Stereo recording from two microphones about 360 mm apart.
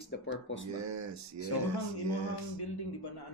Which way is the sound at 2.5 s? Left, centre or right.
Left.